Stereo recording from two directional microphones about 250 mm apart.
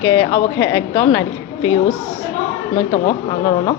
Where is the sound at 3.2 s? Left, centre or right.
Centre.